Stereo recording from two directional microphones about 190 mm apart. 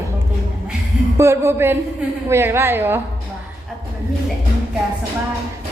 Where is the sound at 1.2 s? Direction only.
15° right (ahead or behind).